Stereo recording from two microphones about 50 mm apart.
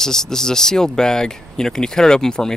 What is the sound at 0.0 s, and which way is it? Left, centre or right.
Speech, centre.